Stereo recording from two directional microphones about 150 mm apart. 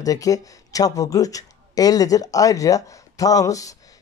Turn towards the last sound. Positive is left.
turn(degrees=20)  # may be behind; listen again after turning